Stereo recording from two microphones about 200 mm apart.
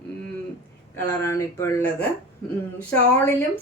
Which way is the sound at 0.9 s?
15° left (ahead or behind).